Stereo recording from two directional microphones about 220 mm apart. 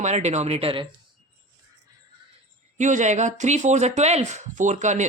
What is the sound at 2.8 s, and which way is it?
Speech, 35° right (ahead or behind).